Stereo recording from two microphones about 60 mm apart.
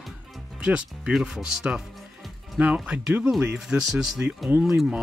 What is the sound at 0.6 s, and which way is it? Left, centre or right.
Speech, centre.